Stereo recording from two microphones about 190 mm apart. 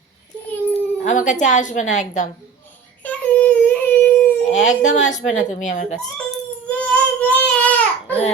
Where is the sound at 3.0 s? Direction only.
10° left (ahead or behind).